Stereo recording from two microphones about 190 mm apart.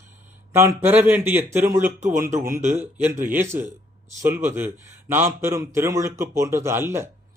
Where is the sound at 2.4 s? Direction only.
45° right (ahead or behind).